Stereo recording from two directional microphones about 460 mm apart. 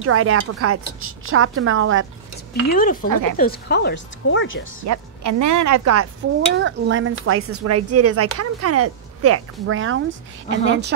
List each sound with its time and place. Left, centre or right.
0.0 s speech: right
2.7 s speech: centre
3.1 s speech: right
3.3 s speech: centre
4.8 s speech: right
6.6 s speech: right